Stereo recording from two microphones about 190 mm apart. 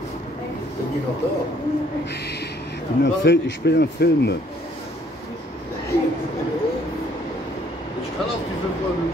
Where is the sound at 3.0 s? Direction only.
65° left (ahead or behind).